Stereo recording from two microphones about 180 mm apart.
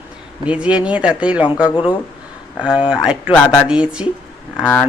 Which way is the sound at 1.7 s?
25° left (ahead or behind).